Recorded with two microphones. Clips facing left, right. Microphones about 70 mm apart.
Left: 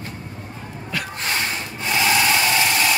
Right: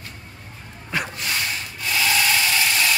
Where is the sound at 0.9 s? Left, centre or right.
Right.